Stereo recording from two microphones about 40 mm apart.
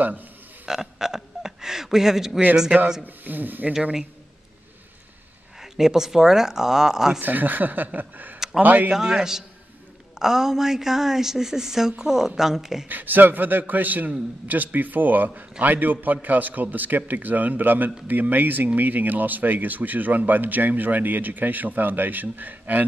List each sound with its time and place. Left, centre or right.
0.0 s a man's voice: right
0.7 s a sound: centre
3.0 s speech: right
5.6 s a woman's voice: centre
7.2 s speech: right
8.9 s a woman's voice: centre
12.8 s speech: right